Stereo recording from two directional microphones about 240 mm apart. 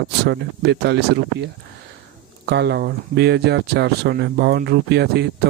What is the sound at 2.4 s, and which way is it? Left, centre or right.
Speech, right.